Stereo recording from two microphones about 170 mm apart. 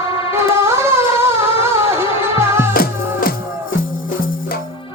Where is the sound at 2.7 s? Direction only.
60° left (ahead or behind).